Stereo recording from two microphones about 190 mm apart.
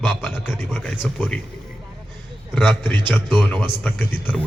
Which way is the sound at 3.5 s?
10° left (ahead or behind).